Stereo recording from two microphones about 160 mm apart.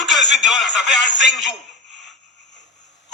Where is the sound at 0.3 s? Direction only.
Centre (ahead or behind).